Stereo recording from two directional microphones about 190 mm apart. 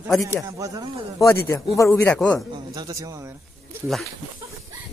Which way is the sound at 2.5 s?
20° right (ahead or behind).